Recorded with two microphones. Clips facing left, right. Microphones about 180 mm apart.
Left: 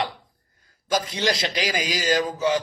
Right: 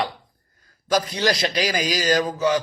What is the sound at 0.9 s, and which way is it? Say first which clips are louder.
A man's voice: right 3 dB; 25° left (ahead or behind).